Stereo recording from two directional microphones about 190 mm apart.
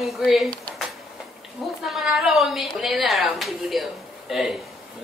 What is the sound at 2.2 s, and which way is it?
A man's voice, centre (ahead or behind).